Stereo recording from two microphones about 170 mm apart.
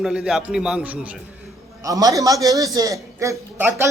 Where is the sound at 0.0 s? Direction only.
Centre (ahead or behind).